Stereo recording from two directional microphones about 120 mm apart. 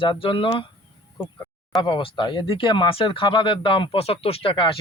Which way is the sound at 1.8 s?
45° left (ahead or behind).